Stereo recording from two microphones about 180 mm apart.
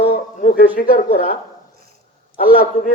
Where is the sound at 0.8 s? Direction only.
50° left (ahead or behind).